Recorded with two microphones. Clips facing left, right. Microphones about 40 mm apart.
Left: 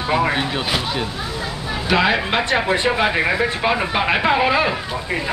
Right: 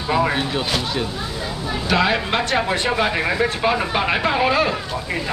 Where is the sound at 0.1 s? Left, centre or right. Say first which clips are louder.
Even; centre.